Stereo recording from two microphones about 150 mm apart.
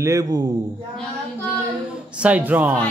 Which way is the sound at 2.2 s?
10° right (ahead or behind).